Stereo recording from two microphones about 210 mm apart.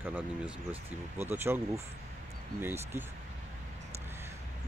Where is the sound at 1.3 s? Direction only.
10° right (ahead or behind).